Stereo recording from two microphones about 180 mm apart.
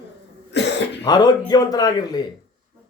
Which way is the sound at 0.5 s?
75° left (ahead or behind).